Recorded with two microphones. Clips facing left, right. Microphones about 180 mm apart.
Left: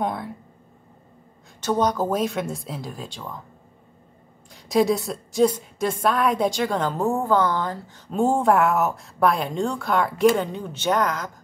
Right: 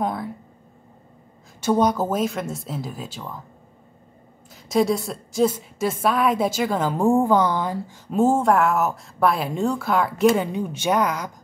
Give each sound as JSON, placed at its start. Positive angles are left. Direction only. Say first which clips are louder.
{"t": 0.0, "sound": "a woman's voice", "louder": "right 1 dB", "side_deg": 0}
{"t": 1.6, "sound": "a woman's voice", "louder": "right 2 dB", "side_deg": -10}
{"t": 4.6, "sound": "a woman's voice", "louder": "even", "side_deg": 0}